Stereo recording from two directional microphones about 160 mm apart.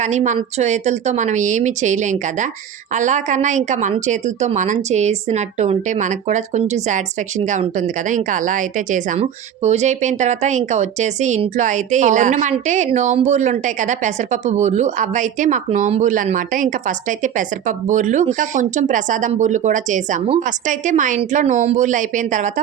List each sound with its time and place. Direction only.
0.0 s a woman's voice: 45° right (ahead or behind)